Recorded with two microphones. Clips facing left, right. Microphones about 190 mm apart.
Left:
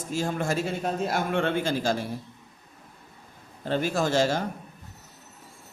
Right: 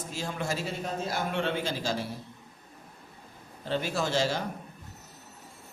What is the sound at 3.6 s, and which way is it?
Speech, 45° left (ahead or behind).